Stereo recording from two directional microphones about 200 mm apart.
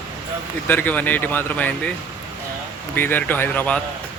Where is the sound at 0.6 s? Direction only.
10° left (ahead or behind).